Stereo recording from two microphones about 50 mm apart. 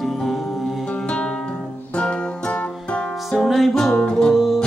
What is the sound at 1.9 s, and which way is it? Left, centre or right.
Music, centre.